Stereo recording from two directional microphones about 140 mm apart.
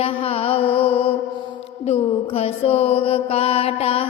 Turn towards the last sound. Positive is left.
turn(degrees=45)  # may be behind; listen again after turning